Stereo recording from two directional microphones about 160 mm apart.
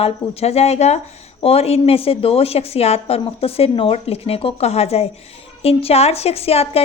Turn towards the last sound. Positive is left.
turn(degrees=40)  # may be behind; listen again after turning